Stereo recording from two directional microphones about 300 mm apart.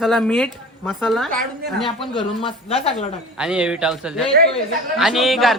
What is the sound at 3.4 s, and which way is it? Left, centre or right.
A man's voice, centre.